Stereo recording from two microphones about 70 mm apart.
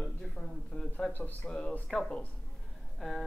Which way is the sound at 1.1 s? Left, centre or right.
Left.